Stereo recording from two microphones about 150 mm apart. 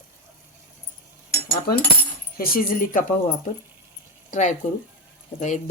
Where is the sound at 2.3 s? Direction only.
80° left.